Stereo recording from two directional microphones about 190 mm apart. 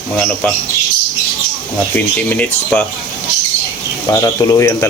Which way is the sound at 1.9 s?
10° left (ahead or behind).